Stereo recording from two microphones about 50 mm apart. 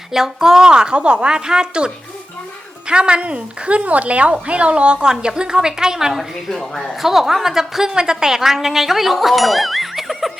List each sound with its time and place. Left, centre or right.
0.1 s a woman's voice: centre
2.9 s a woman's voice: centre
6.5 s a woman's voice: centre